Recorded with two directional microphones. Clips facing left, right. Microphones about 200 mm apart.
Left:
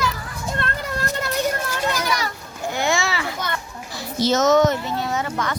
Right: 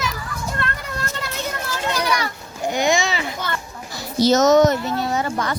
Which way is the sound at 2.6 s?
15° right (ahead or behind).